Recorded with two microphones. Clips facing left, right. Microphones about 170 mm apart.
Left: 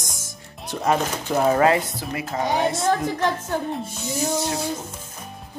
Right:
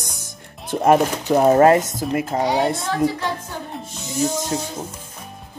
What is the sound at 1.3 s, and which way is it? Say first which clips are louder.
Speech: right 5 dB; 35° right (ahead or behind).